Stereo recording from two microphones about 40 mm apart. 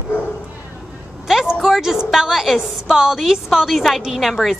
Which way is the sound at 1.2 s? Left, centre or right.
Centre.